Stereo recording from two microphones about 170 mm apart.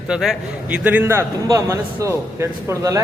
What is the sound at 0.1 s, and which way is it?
A man's voice, 5° right (ahead or behind).